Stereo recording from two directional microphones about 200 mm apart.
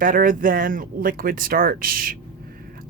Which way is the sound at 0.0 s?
45° right (ahead or behind).